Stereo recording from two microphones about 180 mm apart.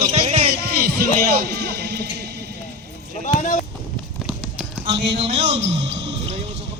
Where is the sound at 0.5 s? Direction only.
60° right (ahead or behind).